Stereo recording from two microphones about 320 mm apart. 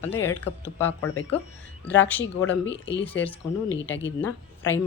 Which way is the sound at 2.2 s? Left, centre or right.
Left.